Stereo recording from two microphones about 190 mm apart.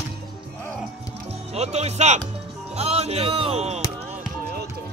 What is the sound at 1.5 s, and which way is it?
Speech, 35° right (ahead or behind).